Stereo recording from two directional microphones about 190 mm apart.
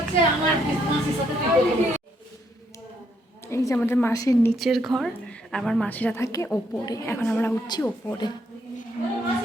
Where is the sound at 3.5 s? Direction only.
15° left (ahead or behind).